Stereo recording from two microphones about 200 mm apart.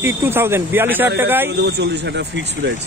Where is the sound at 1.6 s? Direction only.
55° right (ahead or behind).